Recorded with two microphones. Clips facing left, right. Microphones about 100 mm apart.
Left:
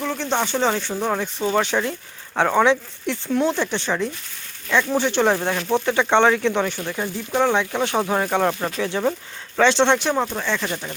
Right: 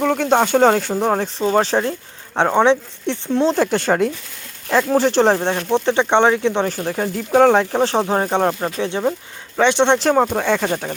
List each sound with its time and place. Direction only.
0.0 s a sound: 60° right (ahead or behind)
0.3 s speech: 50° right (ahead or behind); by 3.5 s 25° right (ahead or behind)
3.5 s speech: 45° right (ahead or behind)
4.7 s speech: 35° right (ahead or behind); by 6.7 s 20° right (ahead or behind)
6.7 s speech: 40° right (ahead or behind); by 10.0 s 20° right (ahead or behind)
10.0 s speech: 40° right (ahead or behind)
10.3 s speech: 55° right (ahead or behind)